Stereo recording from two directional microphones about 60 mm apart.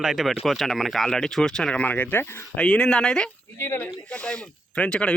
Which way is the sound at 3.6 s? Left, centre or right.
Left.